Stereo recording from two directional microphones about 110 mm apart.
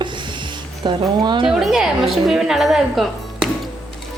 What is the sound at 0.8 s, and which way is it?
Speech, 45° right (ahead or behind).